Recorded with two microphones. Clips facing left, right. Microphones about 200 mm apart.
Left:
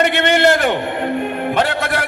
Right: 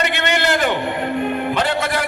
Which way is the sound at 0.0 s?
50° left (ahead or behind).